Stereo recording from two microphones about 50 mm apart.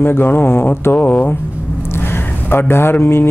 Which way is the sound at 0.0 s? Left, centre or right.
Left.